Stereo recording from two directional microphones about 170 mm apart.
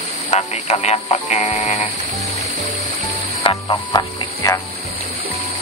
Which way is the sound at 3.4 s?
25° left (ahead or behind).